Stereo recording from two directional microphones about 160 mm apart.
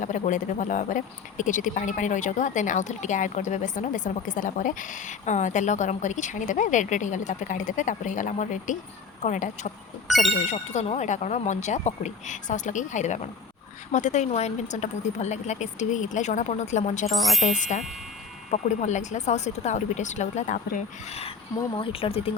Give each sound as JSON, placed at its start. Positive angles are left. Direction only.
{"t": 0.0, "sound": "speech", "side_deg": 50}
{"t": 17.1, "sound": "speech", "side_deg": 0}
{"t": 17.4, "sound": "speech", "side_deg": 50}